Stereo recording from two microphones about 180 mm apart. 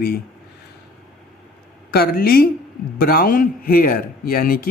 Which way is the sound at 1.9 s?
55° left (ahead or behind).